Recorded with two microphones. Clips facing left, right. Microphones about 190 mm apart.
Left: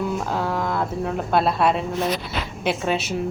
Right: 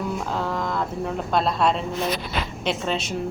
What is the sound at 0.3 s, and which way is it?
A woman's voice, 5° left (ahead or behind).